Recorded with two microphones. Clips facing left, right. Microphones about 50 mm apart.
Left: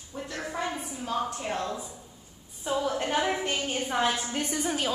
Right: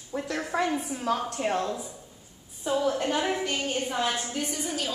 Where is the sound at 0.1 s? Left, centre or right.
Right.